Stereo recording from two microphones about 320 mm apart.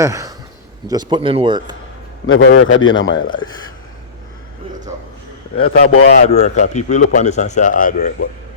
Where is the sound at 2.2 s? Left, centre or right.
Left.